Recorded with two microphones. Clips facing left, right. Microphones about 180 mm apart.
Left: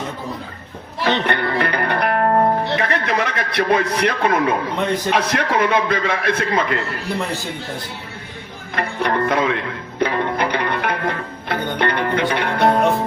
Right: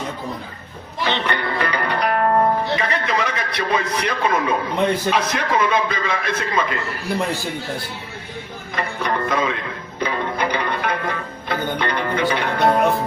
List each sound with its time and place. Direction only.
1.0 s music: 55° left (ahead or behind)
5.1 s a man's voice: 60° left (ahead or behind)
8.7 s music: 60° left (ahead or behind)